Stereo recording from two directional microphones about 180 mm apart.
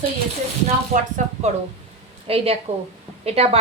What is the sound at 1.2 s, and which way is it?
Speech, 45° right (ahead or behind).